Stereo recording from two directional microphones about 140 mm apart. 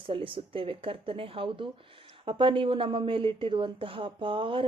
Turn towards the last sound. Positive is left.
turn(degrees=-40)  # may be behind; listen again after turning